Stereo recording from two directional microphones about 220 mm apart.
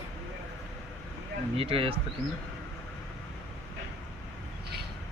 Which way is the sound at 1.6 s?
25° right (ahead or behind).